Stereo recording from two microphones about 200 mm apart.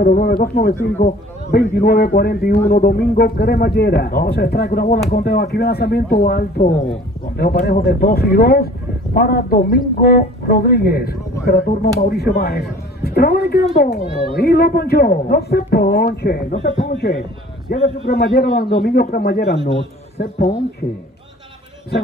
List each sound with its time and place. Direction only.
0.0 s a man's voice: 45° left (ahead or behind)
6.7 s speech: 35° left (ahead or behind)
7.3 s a man's voice: 50° left (ahead or behind)
20.8 s speech: 30° left (ahead or behind)